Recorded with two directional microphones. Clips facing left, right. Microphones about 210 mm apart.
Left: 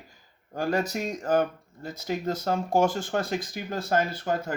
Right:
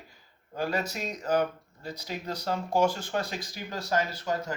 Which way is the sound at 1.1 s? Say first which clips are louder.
Left 1 dB; 45° left (ahead or behind).